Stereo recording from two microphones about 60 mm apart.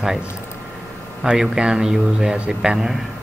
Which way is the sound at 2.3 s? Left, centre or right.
Centre.